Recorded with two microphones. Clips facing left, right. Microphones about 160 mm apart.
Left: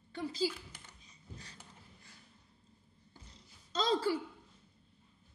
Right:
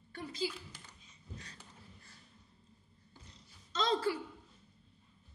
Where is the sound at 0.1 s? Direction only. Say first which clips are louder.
Left 4 dB; 30° left (ahead or behind).